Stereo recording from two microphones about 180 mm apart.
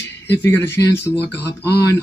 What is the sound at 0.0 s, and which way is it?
Speech, 10° left (ahead or behind).